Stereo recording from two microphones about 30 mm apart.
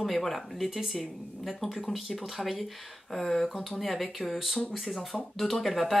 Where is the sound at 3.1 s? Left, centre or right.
Centre.